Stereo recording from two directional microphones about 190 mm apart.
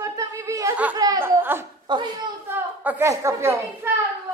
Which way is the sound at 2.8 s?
10° right (ahead or behind).